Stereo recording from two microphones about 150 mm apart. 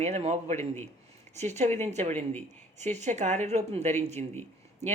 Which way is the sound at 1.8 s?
50° right (ahead or behind).